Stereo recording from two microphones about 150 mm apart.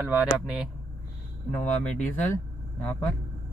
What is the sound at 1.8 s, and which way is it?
Speech, 50° left (ahead or behind).